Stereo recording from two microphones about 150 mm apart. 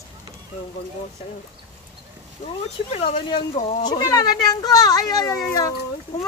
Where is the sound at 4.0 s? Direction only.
25° left (ahead or behind).